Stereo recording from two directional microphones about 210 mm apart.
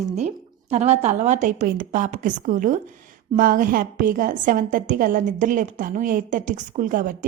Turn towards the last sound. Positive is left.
turn(degrees=-40)  # may be behind; listen again after turning